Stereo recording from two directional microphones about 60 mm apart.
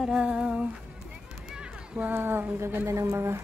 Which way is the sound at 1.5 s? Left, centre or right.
Centre.